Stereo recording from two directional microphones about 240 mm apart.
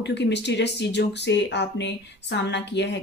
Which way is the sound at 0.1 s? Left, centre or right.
Left.